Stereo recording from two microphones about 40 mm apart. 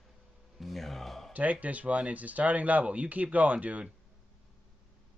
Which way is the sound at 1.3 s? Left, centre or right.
Right.